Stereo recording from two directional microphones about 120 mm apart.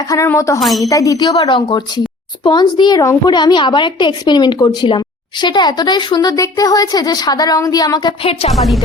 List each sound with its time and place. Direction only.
0.1 s a woman's voice: 25° left (ahead or behind)
1.4 s a woman's voice: 45° left (ahead or behind)
8.2 s a woman's voice: 55° left (ahead or behind)
8.5 s a woman's voice: centre (ahead or behind)